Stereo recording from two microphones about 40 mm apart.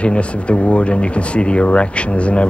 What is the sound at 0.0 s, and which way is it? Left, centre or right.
Speech, left.